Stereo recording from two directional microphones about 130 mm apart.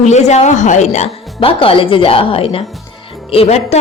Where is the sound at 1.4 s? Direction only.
45° left (ahead or behind).